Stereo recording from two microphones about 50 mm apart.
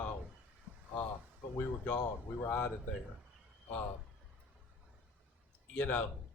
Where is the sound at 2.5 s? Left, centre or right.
Left.